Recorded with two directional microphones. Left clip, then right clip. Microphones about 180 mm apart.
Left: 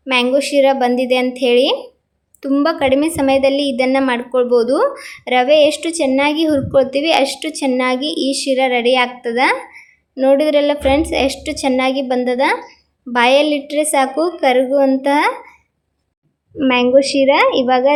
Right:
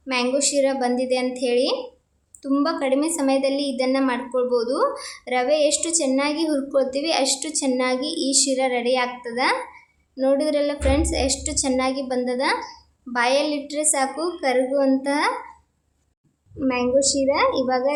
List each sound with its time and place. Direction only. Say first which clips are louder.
0.0 s a woman's voice: left 7 dB; 20° left (ahead or behind)
16.6 s a woman's voice: left 8 dB; 30° left (ahead or behind)